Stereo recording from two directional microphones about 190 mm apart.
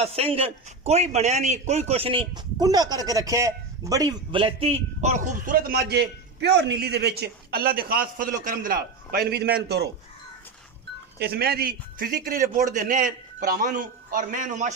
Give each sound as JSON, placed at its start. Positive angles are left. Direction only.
{"t": 0.0, "sound": "a man's voice", "side_deg": -30}
{"t": 11.1, "sound": "a man's voice", "side_deg": -55}